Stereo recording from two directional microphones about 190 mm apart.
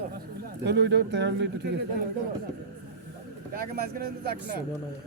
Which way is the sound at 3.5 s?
55° right (ahead or behind).